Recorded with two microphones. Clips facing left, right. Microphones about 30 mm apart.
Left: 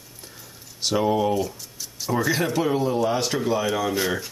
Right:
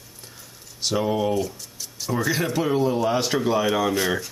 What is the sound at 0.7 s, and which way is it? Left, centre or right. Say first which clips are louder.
Speech: left 2 dB; centre.